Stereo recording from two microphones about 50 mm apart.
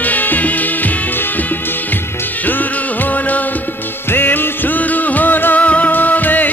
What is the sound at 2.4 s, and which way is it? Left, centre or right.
Music, left.